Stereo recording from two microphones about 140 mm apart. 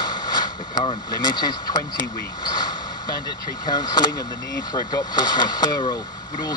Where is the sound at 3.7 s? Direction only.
30° left (ahead or behind).